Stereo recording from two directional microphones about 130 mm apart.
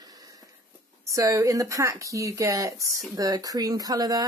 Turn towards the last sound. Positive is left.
turn(degrees=-30)  # may be behind; listen again after turning